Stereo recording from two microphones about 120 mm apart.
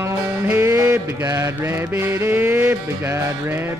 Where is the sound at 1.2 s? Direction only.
25° right (ahead or behind).